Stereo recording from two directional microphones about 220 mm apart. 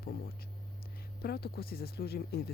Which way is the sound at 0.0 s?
45° left (ahead or behind).